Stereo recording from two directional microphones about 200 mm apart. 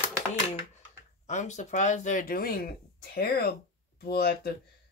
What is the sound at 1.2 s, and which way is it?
Speech, 35° left (ahead or behind).